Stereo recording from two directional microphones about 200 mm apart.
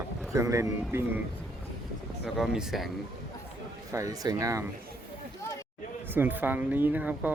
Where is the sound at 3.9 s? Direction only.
15° right (ahead or behind).